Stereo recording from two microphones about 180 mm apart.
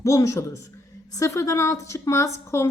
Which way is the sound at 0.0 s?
15° left (ahead or behind).